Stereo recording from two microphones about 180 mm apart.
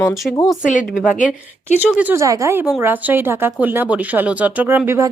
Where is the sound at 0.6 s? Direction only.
45° left (ahead or behind).